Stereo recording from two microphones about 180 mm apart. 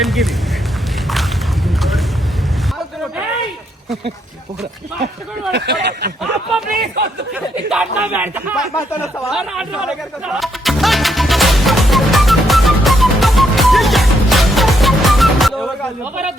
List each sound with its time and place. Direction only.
0.0 s duck: centre (ahead or behind)
1.6 s vehicle: centre (ahead or behind)
5.5 s speech: 70° right (ahead or behind)
7.3 s speech: 5° right (ahead or behind)
8.7 s speech: 15° left (ahead or behind)
9.3 s music: 5° right (ahead or behind)